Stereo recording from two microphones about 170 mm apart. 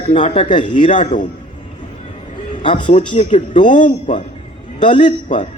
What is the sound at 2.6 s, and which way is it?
Speech, 30° left (ahead or behind).